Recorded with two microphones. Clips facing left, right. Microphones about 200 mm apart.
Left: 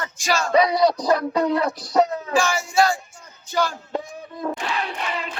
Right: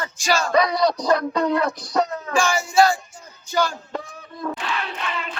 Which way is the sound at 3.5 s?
Centre (ahead or behind).